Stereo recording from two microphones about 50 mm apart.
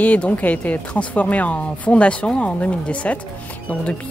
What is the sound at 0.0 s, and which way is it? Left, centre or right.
Speech, left.